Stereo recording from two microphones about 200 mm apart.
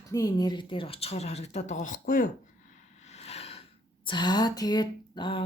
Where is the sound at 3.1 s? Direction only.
30° left (ahead or behind).